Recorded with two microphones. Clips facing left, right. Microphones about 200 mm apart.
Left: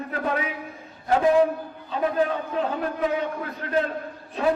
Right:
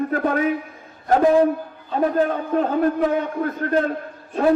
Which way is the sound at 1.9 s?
50° right (ahead or behind).